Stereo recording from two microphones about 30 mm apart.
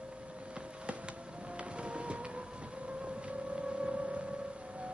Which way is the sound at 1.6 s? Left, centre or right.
Right.